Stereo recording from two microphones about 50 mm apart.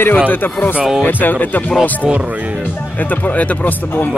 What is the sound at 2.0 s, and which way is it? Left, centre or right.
Speech, centre.